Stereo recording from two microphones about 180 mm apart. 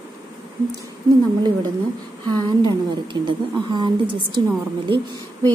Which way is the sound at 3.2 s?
25° right (ahead or behind).